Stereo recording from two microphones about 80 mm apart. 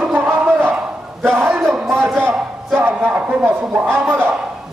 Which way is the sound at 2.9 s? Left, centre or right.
Centre.